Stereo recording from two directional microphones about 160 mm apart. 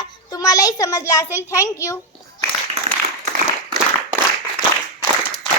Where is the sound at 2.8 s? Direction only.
40° right (ahead or behind).